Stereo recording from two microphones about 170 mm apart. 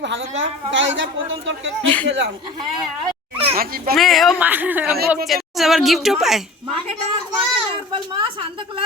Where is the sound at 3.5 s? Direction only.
60° right (ahead or behind).